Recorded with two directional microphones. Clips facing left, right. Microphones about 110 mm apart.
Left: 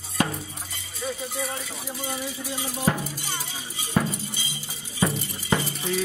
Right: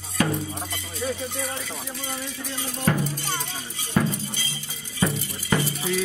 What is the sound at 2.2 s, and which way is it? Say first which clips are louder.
Music: left 1 dB; 10° left (ahead or behind).